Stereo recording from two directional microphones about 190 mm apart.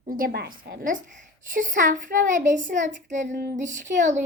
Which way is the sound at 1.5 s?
45° right (ahead or behind).